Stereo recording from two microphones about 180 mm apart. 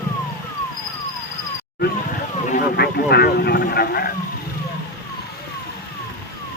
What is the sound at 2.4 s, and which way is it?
Vehicle, 55° left (ahead or behind).